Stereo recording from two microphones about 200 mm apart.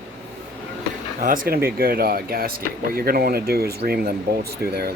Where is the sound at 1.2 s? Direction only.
45° right (ahead or behind).